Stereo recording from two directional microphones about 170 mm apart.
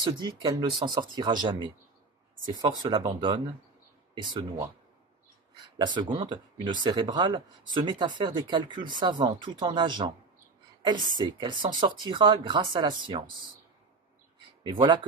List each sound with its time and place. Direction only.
0.0 s speech: 25° right (ahead or behind)
5.8 s speech: 25° right (ahead or behind)
14.7 s speech: 30° right (ahead or behind)